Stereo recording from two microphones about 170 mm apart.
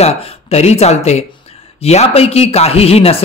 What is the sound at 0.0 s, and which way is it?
A man's voice, 35° left (ahead or behind).